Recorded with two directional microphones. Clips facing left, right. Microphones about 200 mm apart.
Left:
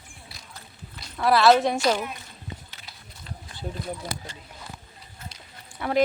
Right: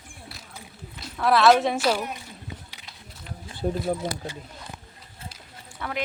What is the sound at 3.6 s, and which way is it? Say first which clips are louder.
Speech: right 9 dB; 45° right (ahead or behind).